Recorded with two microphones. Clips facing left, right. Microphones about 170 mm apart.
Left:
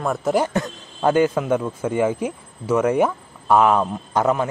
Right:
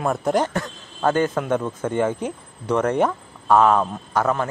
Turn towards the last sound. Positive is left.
turn(degrees=15)  # may be behind; listen again after turning